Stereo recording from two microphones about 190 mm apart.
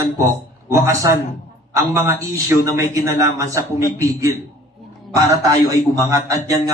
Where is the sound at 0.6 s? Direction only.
15° right (ahead or behind).